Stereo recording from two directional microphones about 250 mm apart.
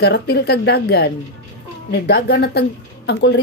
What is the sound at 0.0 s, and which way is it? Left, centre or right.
A woman's voice, left.